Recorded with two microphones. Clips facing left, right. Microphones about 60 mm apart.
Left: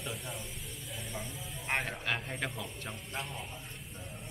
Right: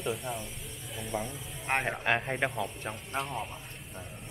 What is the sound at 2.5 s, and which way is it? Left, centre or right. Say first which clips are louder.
Speech: right 7 dB; centre.